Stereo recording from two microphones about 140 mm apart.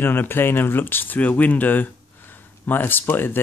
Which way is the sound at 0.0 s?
15° left (ahead or behind).